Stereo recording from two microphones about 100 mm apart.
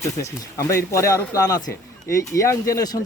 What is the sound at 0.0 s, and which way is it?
Speech, 30° left (ahead or behind).